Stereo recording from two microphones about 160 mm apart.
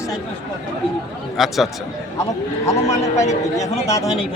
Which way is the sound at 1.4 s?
Centre (ahead or behind).